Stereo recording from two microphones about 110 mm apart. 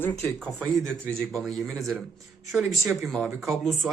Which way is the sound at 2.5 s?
10° right (ahead or behind).